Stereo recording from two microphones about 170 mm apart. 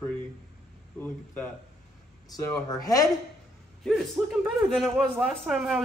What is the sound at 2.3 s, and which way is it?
Speech, 20° left (ahead or behind).